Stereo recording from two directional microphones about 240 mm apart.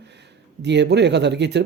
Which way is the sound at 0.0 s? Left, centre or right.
Right.